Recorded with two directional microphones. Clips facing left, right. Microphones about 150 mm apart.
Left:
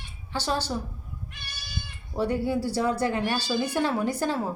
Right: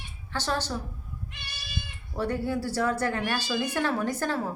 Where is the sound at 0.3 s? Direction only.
10° left (ahead or behind).